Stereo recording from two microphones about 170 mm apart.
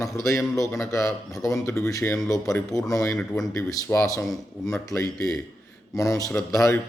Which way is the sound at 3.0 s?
5° left (ahead or behind).